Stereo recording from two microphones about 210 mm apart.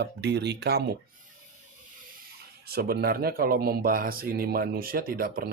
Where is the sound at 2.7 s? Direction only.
50° right (ahead or behind).